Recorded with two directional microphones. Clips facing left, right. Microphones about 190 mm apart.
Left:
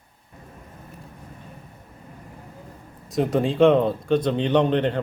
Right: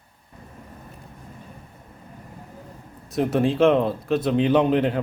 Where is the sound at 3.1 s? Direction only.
Centre (ahead or behind).